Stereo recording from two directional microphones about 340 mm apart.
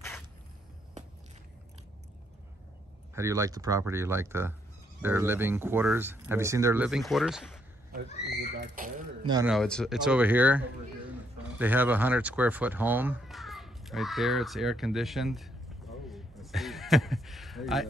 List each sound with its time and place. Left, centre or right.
3.2 s speech: centre
8.2 s speech: right
9.3 s speech: centre
16.1 s a sound: centre